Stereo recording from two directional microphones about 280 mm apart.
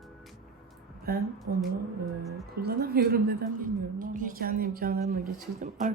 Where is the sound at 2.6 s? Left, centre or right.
Right.